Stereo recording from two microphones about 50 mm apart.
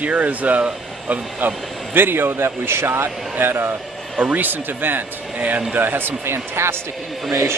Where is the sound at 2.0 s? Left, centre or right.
Right.